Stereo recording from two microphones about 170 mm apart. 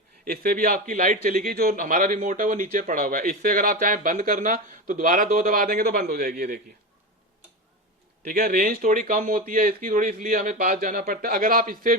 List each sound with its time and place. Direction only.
0.3 s a man's voice: 60° right (ahead or behind)
8.2 s a man's voice: 60° right (ahead or behind)